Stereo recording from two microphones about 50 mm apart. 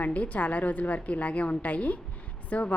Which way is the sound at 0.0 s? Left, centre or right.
Left.